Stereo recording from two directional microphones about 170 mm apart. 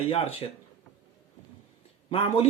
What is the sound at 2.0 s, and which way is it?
Speech, 35° left (ahead or behind).